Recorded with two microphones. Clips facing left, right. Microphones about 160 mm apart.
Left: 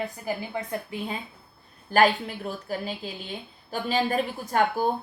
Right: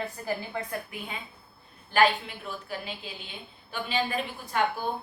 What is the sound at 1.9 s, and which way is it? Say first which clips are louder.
A woman's voice: left 3 dB; 40° left (ahead or behind).